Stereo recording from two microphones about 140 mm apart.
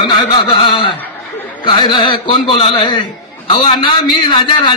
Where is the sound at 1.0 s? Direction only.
10° left (ahead or behind).